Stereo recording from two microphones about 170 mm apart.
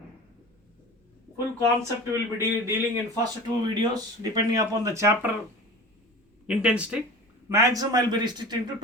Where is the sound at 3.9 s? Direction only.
25° right (ahead or behind).